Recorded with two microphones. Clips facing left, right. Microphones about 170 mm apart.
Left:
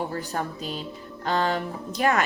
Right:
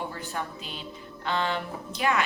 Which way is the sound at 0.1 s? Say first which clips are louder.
Left 5 dB; 40° left (ahead or behind).